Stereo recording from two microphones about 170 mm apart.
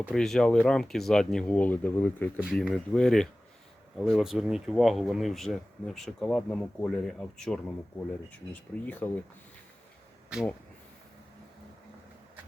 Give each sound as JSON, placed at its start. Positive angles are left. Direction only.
{"t": 0.1, "sound": "speech", "side_deg": 5}
{"t": 2.4, "sound": "speech", "side_deg": 0}